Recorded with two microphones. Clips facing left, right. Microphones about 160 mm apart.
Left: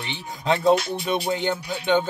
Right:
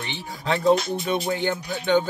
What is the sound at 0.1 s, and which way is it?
Speech, 20° left (ahead or behind).